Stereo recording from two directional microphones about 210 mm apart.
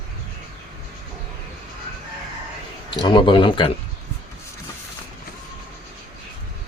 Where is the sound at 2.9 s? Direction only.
20° left (ahead or behind).